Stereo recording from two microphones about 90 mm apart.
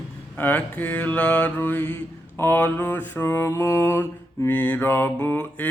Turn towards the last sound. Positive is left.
turn(degrees=25)  # may be behind; listen again after turning